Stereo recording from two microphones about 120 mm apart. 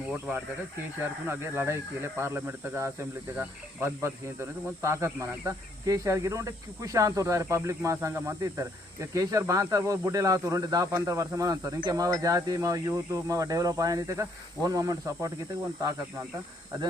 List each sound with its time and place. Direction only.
1.3 s speech: 20° right (ahead or behind)